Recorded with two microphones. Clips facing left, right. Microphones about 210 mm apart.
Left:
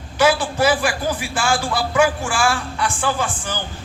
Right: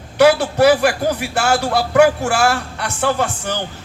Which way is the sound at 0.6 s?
65° right (ahead or behind).